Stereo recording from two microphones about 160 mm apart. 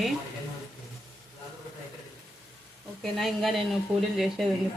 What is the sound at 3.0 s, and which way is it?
Speech, centre (ahead or behind).